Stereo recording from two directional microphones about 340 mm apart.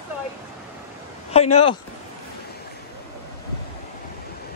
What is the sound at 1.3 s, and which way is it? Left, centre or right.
Speech, centre.